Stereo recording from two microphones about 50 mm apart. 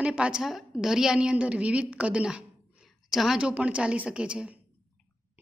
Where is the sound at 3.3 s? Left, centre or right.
Right.